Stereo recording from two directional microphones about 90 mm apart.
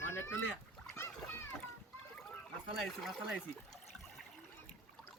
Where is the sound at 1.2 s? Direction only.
25° left (ahead or behind).